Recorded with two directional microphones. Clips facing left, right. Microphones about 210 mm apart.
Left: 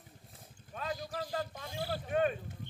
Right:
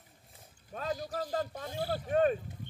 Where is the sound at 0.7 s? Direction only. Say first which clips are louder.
Right 3 dB; 40° right (ahead or behind).